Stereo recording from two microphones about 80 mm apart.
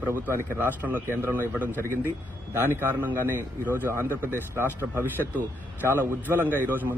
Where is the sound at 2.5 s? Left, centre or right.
Right.